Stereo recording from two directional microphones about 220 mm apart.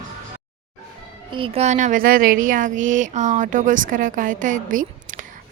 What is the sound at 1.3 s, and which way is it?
Speech, 25° right (ahead or behind).